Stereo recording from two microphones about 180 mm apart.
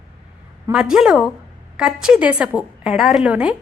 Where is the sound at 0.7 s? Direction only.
5° right (ahead or behind).